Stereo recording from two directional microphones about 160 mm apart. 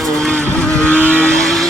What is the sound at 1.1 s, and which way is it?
Vehicle, 5° left (ahead or behind).